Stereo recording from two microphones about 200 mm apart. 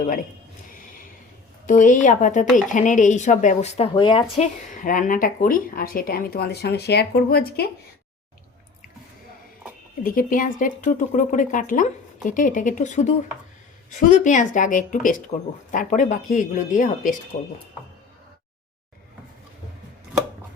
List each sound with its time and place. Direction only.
1.6 s speech: 40° left (ahead or behind); by 4.4 s 25° left (ahead or behind)
4.7 s speech: 40° left (ahead or behind)
10.0 s speech: 45° left (ahead or behind)